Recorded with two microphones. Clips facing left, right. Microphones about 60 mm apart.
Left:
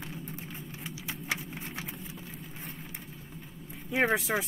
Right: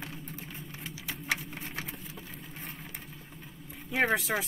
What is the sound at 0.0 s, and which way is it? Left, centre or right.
Vehicle, centre.